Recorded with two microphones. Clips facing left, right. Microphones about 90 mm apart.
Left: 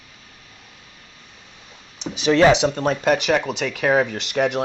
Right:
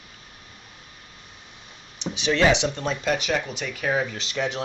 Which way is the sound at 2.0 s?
40° left (ahead or behind).